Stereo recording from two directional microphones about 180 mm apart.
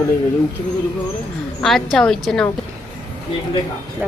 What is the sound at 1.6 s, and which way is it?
Speech, centre (ahead or behind).